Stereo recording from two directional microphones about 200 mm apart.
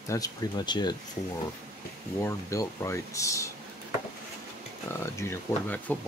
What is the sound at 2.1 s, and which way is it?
Speech, 15° left (ahead or behind).